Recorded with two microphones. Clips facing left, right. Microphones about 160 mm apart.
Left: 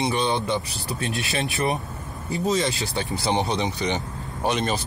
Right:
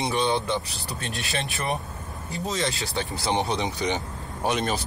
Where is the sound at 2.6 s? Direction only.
5° left (ahead or behind).